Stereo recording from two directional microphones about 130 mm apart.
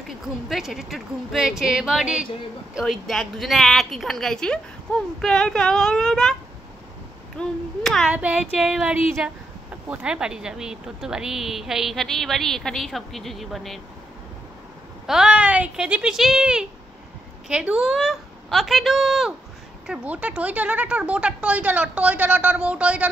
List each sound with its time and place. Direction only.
0.5 s speech: centre (ahead or behind)
7.3 s speech: 5° left (ahead or behind)
8.1 s speech: 10° right (ahead or behind)
15.0 s speech: 5° right (ahead or behind)